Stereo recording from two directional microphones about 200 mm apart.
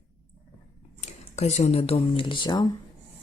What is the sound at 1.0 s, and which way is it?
Speech, 35° left (ahead or behind).